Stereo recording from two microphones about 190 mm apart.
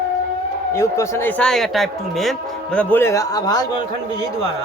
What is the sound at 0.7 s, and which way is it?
A man's voice, 15° left (ahead or behind).